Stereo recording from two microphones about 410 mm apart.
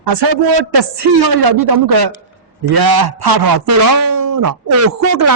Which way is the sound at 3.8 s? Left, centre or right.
Right.